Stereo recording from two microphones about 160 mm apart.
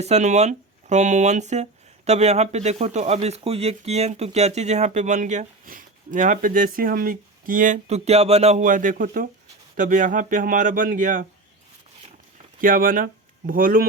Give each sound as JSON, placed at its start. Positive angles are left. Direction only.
{"t": 0.0, "sound": "speech", "side_deg": -45}
{"t": 12.6, "sound": "speech", "side_deg": -60}